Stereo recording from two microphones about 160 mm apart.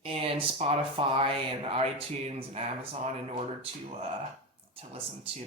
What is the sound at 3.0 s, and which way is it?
Speech, 45° right (ahead or behind).